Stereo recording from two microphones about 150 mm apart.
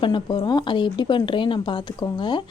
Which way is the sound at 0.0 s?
30° left (ahead or behind).